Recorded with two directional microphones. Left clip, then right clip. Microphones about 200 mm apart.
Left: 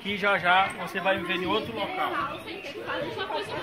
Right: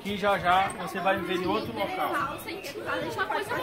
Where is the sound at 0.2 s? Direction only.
15° left (ahead or behind).